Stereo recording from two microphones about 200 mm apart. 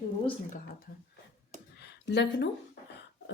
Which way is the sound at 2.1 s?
60° left (ahead or behind).